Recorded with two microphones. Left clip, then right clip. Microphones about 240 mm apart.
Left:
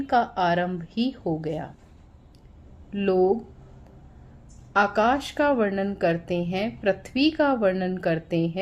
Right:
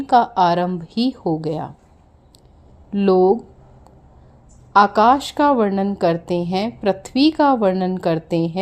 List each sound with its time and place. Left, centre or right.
0.0 s a woman's voice: right
2.9 s a woman's voice: right
4.7 s a woman's voice: right